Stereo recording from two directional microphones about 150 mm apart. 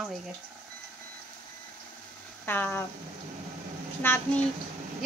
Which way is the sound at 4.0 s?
15° left (ahead or behind).